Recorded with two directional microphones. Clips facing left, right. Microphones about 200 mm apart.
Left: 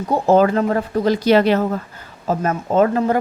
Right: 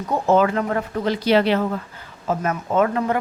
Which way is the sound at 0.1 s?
35° left (ahead or behind).